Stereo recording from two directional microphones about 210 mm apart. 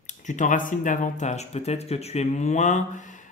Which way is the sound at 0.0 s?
35° left (ahead or behind).